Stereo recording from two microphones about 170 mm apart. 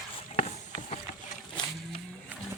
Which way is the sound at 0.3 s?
40° left (ahead or behind).